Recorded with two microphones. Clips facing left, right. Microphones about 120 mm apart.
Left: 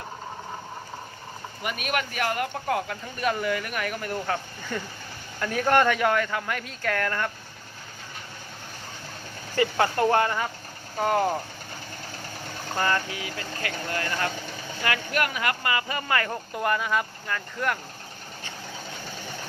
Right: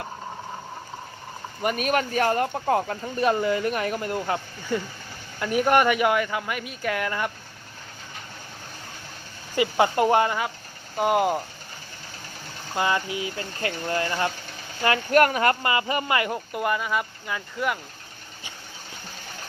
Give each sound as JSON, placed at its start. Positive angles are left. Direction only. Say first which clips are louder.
{"t": 1.6, "sound": "speech", "louder": "right 6 dB", "side_deg": -40}
{"t": 4.7, "sound": "speech", "louder": "right 5 dB", "side_deg": -10}
{"t": 9.6, "sound": "speech", "louder": "right 2 dB", "side_deg": -15}
{"t": 12.7, "sound": "speech", "louder": "right 2 dB", "side_deg": -15}
{"t": 15.1, "sound": "speech", "louder": "right 11 dB", "side_deg": -45}
{"t": 15.6, "sound": "speech", "louder": "right 3 dB", "side_deg": -25}